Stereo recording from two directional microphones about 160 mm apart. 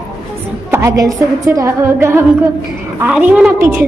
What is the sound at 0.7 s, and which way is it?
A woman's voice, 15° right (ahead or behind).